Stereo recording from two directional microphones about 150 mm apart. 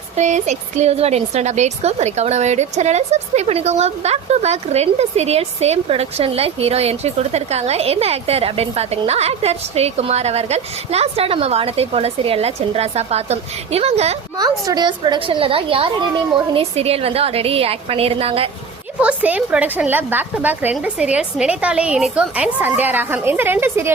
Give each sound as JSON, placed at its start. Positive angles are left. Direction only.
{"t": 0.2, "sound": "a woman's voice", "side_deg": -50}
{"t": 14.3, "sound": "a woman's voice", "side_deg": -25}
{"t": 18.9, "sound": "a woman's voice", "side_deg": -10}